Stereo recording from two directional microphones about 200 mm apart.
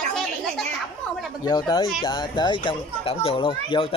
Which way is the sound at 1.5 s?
20° left (ahead or behind).